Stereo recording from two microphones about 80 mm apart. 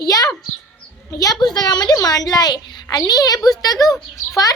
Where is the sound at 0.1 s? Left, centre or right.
Left.